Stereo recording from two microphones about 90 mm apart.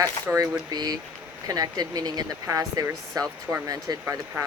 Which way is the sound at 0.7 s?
50° right (ahead or behind).